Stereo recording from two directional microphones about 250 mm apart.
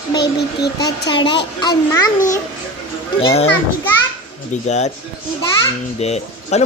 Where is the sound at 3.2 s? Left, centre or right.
Left.